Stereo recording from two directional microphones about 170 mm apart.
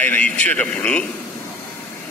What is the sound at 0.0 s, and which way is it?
A man's voice, 10° left (ahead or behind).